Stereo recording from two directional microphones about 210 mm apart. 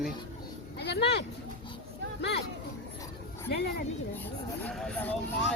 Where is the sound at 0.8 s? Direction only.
55° left (ahead or behind).